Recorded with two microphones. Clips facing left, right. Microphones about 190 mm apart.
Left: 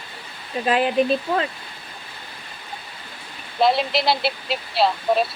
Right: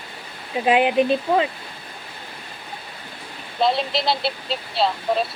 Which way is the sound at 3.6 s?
5° left (ahead or behind).